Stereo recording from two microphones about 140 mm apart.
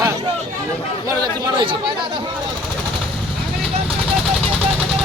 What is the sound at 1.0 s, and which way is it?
Speech, 25° right (ahead or behind).